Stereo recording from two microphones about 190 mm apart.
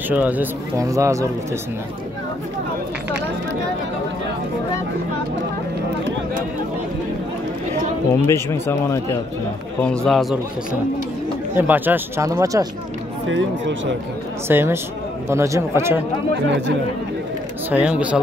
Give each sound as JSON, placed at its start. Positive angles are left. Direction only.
{"t": 0.1, "sound": "speech", "side_deg": -10}
{"t": 8.3, "sound": "speech", "side_deg": 15}
{"t": 9.8, "sound": "a man's voice", "side_deg": 5}
{"t": 11.5, "sound": "speech", "side_deg": -10}
{"t": 13.3, "sound": "speech", "side_deg": -75}
{"t": 14.5, "sound": "speech", "side_deg": -10}
{"t": 16.4, "sound": "speech", "side_deg": -70}
{"t": 17.6, "sound": "speech", "side_deg": -5}